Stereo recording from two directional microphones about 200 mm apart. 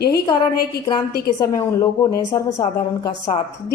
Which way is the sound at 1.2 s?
20° left (ahead or behind).